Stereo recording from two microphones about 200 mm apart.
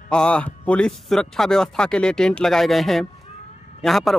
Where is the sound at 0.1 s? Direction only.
5° left (ahead or behind).